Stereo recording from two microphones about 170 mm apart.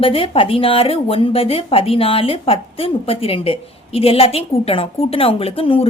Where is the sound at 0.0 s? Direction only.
30° left (ahead or behind).